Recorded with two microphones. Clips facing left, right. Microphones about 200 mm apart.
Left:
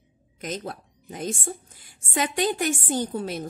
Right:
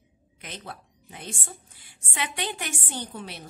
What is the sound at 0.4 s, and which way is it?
A woman's voice, 40° left (ahead or behind).